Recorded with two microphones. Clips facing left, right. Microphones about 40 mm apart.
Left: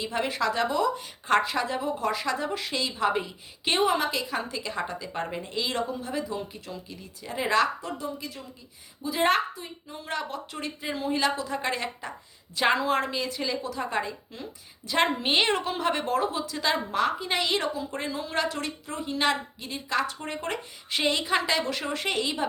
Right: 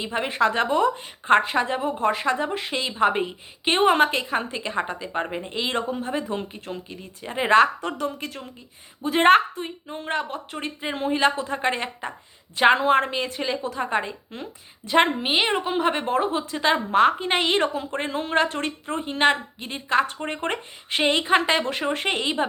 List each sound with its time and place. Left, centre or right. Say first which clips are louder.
0.0 s a woman's voice: right 5 dB; right
3.8 s a woman's voice: right 7 dB; right
7.8 s a woman's voice: right 6 dB; right
15.2 s a woman's voice: right 2 dB; centre; by 22.4 s right